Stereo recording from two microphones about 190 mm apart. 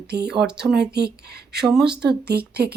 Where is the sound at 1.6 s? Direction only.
Centre (ahead or behind).